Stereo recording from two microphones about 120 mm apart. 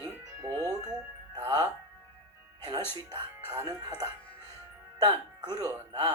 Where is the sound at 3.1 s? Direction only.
30° right (ahead or behind).